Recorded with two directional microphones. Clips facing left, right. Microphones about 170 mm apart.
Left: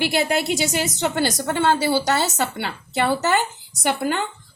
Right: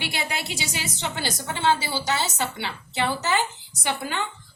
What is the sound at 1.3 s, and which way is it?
A woman's voice, 50° left (ahead or behind).